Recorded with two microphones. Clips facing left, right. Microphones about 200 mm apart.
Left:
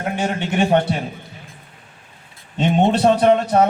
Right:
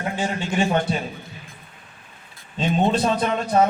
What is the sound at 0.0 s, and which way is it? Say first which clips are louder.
Speech: left 3 dB; 65° left (ahead or behind).